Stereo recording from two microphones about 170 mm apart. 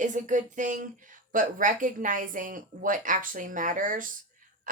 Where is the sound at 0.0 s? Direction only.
45° right (ahead or behind).